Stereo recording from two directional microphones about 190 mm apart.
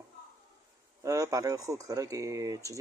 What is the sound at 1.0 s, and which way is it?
Speech, 15° right (ahead or behind).